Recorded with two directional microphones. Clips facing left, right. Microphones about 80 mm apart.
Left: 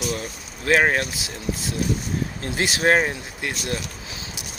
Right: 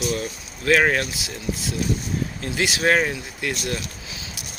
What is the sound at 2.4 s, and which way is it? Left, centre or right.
Speech, left.